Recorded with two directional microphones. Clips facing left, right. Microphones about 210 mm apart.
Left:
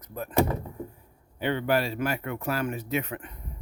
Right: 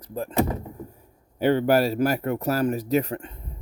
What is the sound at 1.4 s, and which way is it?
Speech, 40° right (ahead or behind).